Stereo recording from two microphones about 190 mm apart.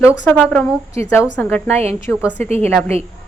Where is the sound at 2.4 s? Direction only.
35° right (ahead or behind).